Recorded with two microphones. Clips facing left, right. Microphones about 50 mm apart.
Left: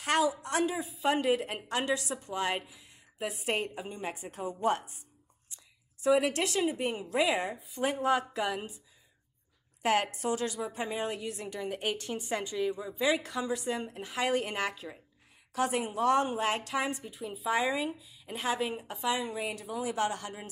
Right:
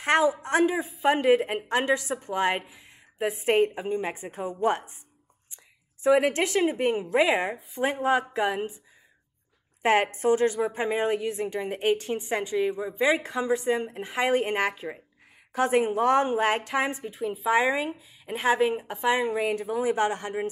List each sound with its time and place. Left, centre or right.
0.0 s a woman's voice: right
6.0 s a woman's voice: right
9.8 s a woman's voice: right